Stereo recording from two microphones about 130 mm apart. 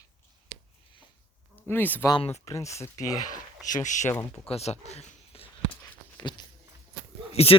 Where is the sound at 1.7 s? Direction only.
15° left (ahead or behind).